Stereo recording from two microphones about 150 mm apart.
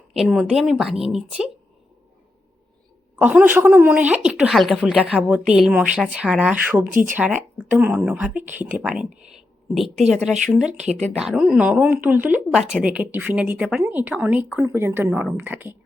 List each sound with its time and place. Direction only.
0.1 s a woman's voice: 5° right (ahead or behind)
3.2 s a woman's voice: 10° right (ahead or behind)